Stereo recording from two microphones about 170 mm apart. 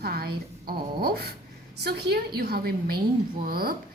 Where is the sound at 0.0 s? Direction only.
65° right (ahead or behind).